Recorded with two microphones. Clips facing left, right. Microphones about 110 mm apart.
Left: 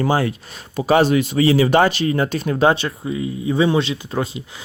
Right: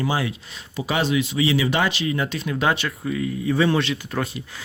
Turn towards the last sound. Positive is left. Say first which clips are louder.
# left 3 dB
turn(degrees=25)  # may be behind; listen again after turning